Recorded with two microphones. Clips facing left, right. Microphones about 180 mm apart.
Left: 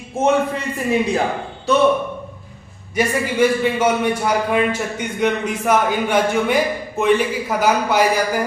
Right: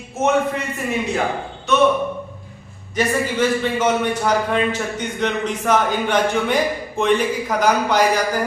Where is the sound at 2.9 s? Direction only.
10° left (ahead or behind).